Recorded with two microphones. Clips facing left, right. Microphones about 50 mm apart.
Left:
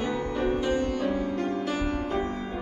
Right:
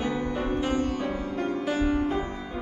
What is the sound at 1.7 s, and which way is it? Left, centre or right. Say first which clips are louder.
Music: right 4 dB; centre.